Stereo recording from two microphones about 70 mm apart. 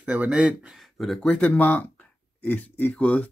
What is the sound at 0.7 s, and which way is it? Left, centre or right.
Speech, centre.